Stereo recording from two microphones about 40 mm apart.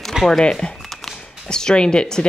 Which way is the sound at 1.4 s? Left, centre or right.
Centre.